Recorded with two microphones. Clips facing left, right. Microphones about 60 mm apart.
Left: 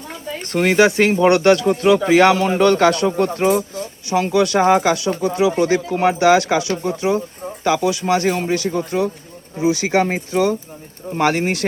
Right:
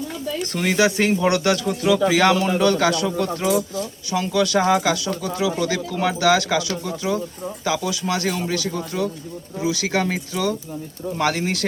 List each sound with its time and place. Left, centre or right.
0.3 s speech: left